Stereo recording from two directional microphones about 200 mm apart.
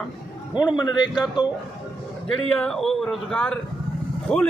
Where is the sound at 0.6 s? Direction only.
20° left (ahead or behind).